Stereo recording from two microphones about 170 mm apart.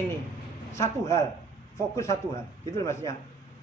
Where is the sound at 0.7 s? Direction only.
15° left (ahead or behind).